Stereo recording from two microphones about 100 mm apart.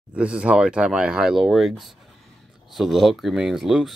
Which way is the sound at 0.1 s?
10° right (ahead or behind).